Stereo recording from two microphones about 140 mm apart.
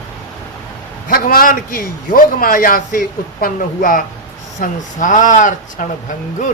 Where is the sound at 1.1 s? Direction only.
90° left.